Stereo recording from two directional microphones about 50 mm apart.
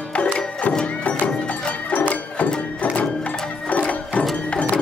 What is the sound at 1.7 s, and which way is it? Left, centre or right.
Music, left.